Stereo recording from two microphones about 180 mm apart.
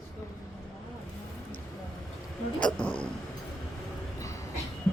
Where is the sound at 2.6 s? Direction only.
5° left (ahead or behind).